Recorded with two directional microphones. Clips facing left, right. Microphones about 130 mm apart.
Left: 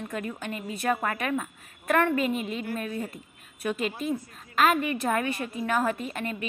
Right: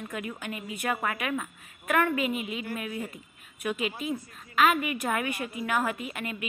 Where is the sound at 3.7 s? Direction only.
5° right (ahead or behind).